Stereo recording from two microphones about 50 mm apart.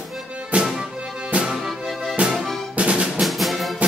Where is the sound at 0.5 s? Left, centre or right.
Right.